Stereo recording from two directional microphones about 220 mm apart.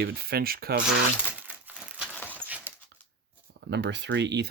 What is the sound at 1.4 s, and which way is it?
Crumpling, 5° right (ahead or behind).